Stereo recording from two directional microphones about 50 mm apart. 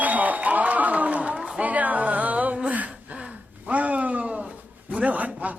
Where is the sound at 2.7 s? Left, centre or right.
Right.